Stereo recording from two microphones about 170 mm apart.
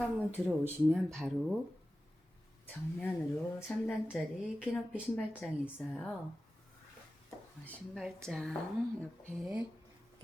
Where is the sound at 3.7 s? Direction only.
10° left (ahead or behind).